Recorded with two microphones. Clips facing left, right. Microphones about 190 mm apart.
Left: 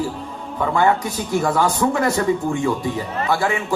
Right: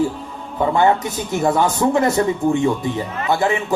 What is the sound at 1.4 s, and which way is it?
Speech, 25° right (ahead or behind).